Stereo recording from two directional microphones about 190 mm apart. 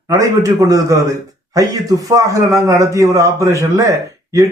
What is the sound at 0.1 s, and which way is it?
Speech, 15° right (ahead or behind).